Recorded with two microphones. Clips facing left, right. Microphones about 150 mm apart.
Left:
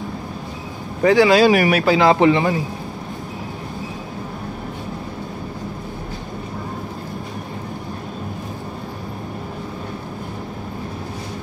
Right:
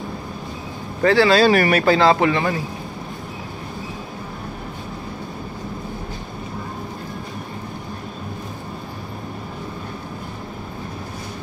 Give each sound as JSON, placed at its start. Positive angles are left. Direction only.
{"t": 1.0, "sound": "speech", "side_deg": 15}
{"t": 2.0, "sound": "speech", "side_deg": 20}